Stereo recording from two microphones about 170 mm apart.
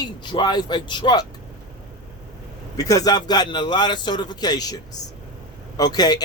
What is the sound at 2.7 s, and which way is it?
Speech, 20° left (ahead or behind).